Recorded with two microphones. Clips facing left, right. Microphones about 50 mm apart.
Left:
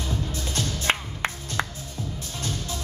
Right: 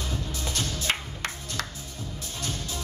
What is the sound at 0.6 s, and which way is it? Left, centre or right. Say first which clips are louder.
Music: left 4 dB; left.